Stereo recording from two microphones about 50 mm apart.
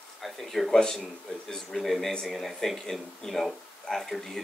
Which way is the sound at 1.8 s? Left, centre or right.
Centre.